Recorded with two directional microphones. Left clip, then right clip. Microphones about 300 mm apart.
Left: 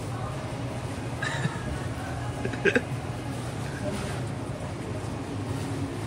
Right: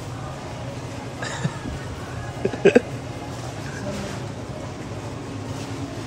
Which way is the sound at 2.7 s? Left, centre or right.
Centre.